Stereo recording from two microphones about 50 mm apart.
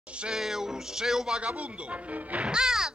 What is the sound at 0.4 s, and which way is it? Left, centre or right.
A child's voice, centre.